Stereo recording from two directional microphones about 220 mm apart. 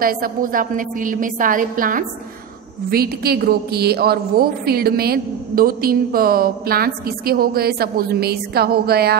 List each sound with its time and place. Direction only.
0.0 s a woman's voice: 40° right (ahead or behind)